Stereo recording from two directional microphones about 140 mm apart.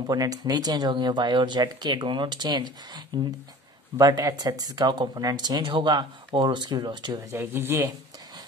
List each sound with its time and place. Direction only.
0.0 s speech: 25° right (ahead or behind)
4.0 s speech: 30° right (ahead or behind)
7.3 s speech: 15° right (ahead or behind)